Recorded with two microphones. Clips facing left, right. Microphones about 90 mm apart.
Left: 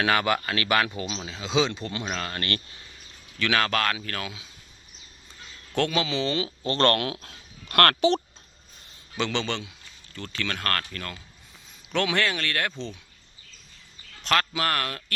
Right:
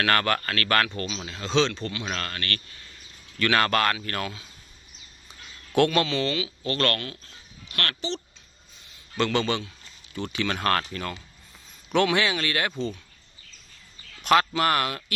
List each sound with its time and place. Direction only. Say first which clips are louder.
0.0 s speech: even; 10° left (ahead or behind)
1.0 s speech: even; 20° left (ahead or behind)
1.3 s speech: right 1 dB; 5° left (ahead or behind)
2.3 s speech: left 2 dB; 25° left (ahead or behind)
3.3 s speech: right 2 dB; centre (ahead or behind)
5.7 s speech: right 4 dB; 5° right (ahead or behind)
6.1 s speech: right 1 dB; 15° left (ahead or behind)
6.3 s speech: left 1 dB; 30° left (ahead or behind)
7.0 s speech: left 7 dB; 60° left (ahead or behind)
9.1 s speech: right 3 dB; centre (ahead or behind)
14.3 s speech: right 4 dB; 10° right (ahead or behind)